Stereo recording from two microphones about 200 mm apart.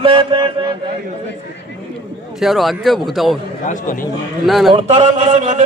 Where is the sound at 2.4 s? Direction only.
Centre (ahead or behind).